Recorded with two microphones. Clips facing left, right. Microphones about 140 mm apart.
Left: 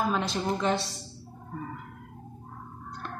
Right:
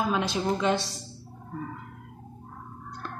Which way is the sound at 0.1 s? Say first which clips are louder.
Right 2 dB; centre (ahead or behind).